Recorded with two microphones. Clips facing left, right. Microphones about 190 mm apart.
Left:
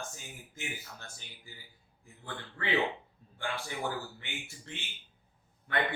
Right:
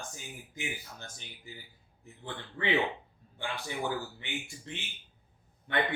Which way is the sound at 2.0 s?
20° right (ahead or behind).